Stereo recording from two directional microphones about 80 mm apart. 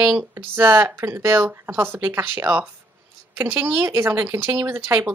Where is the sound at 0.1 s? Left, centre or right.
Right.